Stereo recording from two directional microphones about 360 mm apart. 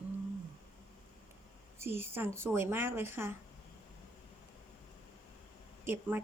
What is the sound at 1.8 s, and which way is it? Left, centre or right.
Speech, centre.